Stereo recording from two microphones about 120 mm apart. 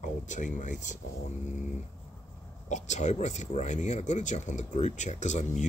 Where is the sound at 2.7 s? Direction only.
75° left (ahead or behind).